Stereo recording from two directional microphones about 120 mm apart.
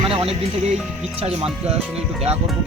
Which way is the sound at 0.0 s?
50° right (ahead or behind).